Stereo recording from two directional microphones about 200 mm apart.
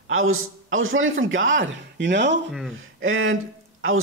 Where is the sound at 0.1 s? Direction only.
90° right; by 2.4 s 60° right (ahead or behind).